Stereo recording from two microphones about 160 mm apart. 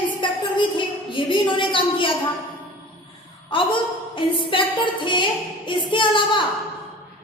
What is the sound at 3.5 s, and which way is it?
A woman's voice, 30° left (ahead or behind).